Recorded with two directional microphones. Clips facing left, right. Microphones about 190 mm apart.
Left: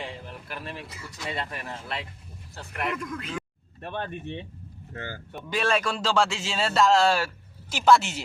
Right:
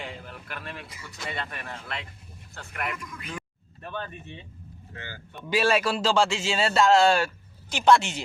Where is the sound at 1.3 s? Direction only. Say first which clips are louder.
Left 2 dB; 20° left (ahead or behind).